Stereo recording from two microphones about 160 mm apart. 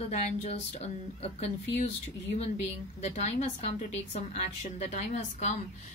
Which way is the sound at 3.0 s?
45° left (ahead or behind).